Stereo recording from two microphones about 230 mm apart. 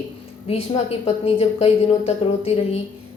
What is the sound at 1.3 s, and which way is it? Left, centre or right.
A woman's voice, left.